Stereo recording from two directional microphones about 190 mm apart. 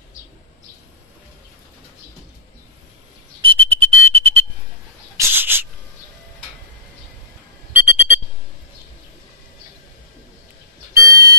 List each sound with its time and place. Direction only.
3.4 s whistle: 30° right (ahead or behind)
5.1 s owl: 10° right (ahead or behind)
7.7 s a sound: 10° right (ahead or behind)
10.9 s owl: 15° right (ahead or behind)